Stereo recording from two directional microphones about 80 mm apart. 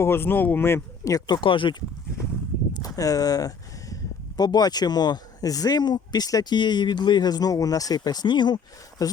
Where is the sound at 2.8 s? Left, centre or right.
Left.